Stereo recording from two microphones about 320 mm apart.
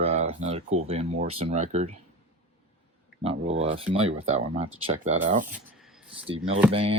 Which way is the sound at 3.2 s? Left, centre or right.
Centre.